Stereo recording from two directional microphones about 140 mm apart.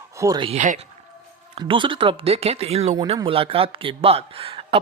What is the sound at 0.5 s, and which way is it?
Speech, 60° right (ahead or behind).